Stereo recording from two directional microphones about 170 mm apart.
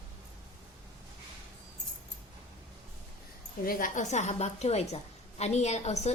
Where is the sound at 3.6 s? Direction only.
50° left (ahead or behind).